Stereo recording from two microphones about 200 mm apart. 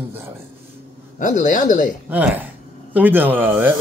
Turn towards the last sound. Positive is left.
turn(degrees=-10)  # may be behind; listen again after turning